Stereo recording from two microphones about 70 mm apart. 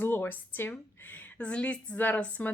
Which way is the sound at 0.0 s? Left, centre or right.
Left.